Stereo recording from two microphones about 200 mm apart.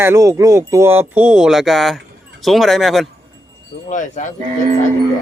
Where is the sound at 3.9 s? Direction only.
35° left (ahead or behind).